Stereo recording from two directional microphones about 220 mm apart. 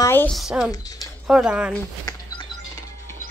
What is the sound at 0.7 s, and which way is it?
Speech, 15° left (ahead or behind).